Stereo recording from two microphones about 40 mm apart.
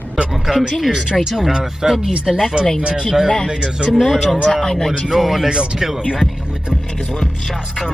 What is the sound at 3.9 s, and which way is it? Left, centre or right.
Speech, centre.